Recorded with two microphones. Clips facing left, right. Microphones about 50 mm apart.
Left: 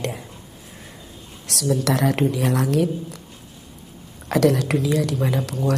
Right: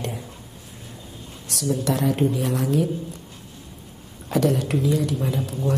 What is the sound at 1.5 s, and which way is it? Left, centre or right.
Speech, left.